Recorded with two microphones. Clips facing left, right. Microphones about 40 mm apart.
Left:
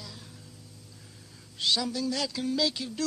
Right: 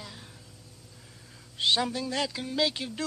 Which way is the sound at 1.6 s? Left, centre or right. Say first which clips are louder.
Right 2 dB; right.